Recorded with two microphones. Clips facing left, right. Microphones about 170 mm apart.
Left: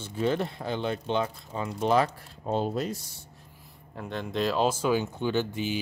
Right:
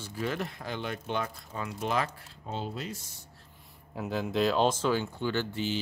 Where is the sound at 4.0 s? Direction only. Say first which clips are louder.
Right 1 dB; 5° right (ahead or behind); by 5.7 s 15° left (ahead or behind).